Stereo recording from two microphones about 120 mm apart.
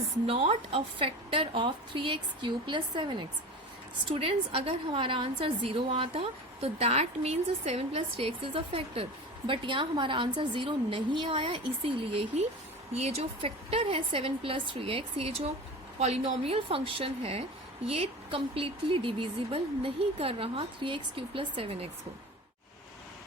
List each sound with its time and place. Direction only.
0.3 s a woman's voice: 55° right (ahead or behind)
4.1 s a woman's voice: 50° right (ahead or behind)